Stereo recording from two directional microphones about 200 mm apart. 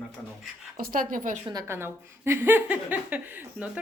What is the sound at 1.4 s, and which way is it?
A woman's voice, 20° right (ahead or behind).